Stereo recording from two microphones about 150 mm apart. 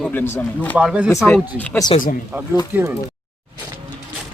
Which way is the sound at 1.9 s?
40° left (ahead or behind).